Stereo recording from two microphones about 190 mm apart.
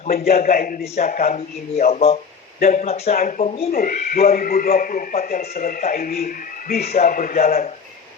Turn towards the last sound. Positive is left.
turn(degrees=50)  # may be behind; listen again after turning